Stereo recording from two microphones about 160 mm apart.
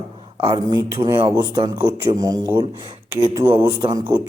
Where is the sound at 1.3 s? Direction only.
20° right (ahead or behind).